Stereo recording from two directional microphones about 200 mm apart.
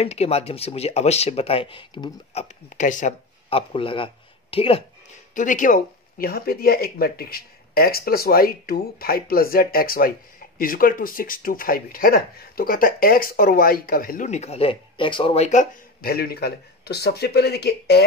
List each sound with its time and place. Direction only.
0.0 s speech: 30° left (ahead or behind)
2.4 s speech: 40° left (ahead or behind)
5.3 s speech: 40° left (ahead or behind)